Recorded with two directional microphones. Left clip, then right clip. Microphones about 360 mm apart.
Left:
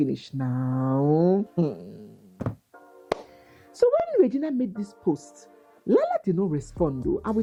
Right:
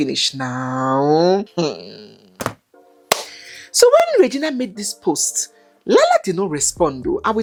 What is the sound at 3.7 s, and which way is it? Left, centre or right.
Speech, centre.